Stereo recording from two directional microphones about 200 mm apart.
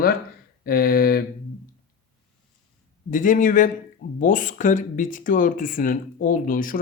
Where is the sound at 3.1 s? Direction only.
40° left (ahead or behind).